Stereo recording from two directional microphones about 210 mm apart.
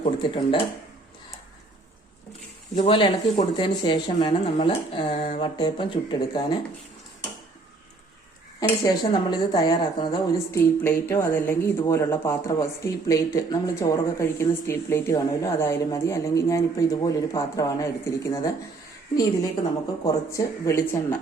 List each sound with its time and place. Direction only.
0.0 s speech: 20° left (ahead or behind)
2.7 s speech: 25° left (ahead or behind)
8.6 s speech: 20° left (ahead or behind)
20.1 s speech: 15° left (ahead or behind)